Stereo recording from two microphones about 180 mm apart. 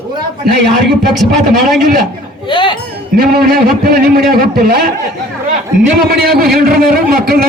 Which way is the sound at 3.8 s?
60° right (ahead or behind).